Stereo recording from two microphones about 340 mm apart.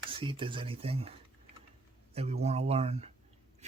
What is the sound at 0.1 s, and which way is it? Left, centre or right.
Speech, centre.